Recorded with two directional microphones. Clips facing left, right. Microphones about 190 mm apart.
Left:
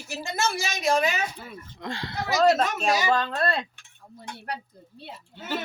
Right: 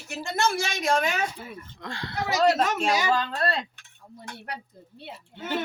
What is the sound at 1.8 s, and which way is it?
Speech, 20° left (ahead or behind).